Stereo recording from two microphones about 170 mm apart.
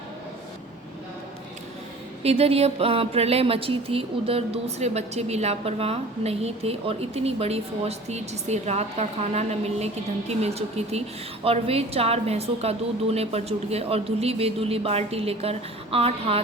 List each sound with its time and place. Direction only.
2.2 s speech: 35° right (ahead or behind)